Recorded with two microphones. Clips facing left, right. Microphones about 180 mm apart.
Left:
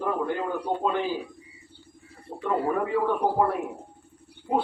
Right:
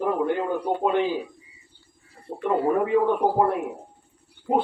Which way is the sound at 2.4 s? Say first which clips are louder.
Right 4 dB; 15° right (ahead or behind).